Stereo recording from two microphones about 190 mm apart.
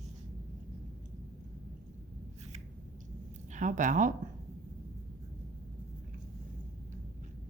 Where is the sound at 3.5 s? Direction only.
40° right (ahead or behind).